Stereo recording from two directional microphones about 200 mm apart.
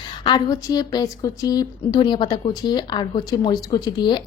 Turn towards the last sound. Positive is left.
turn(degrees=20)  # may be behind; listen again after turning